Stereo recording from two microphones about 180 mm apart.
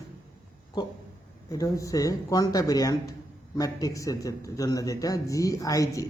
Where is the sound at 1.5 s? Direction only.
20° left (ahead or behind).